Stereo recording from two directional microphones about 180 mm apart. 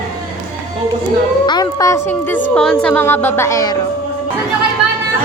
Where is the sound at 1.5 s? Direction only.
20° left (ahead or behind).